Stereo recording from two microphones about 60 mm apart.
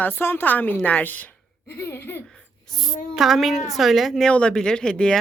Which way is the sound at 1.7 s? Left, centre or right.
Left.